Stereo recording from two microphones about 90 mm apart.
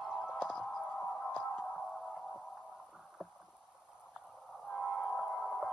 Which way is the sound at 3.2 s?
5° right (ahead or behind).